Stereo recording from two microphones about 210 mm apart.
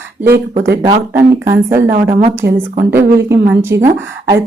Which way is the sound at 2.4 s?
50° right (ahead or behind).